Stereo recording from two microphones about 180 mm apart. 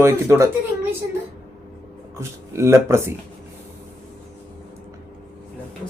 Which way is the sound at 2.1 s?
15° right (ahead or behind).